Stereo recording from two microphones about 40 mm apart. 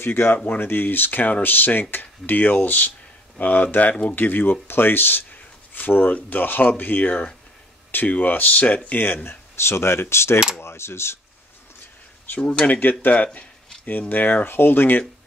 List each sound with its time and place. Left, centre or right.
0.0 s speech: left
5.8 s speech: left
10.6 s cutlery: left
12.4 s speech: left
13.0 s speech: left
14.5 s speech: left